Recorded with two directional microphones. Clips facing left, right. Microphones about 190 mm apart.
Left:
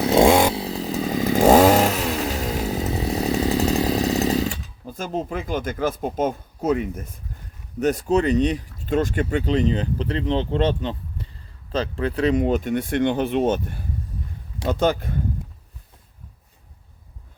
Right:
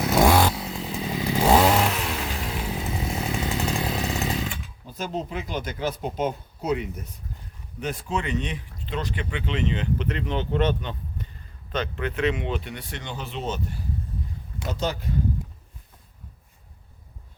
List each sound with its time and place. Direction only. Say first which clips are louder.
0.0 s chainsaw: left 4 dB; 25° left (ahead or behind)
0.6 s chainsaw: left 6 dB; 35° left (ahead or behind)
7.8 s speech: left 10 dB; 40° left (ahead or behind)